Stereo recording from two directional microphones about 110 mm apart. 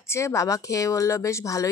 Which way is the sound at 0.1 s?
25° left (ahead or behind).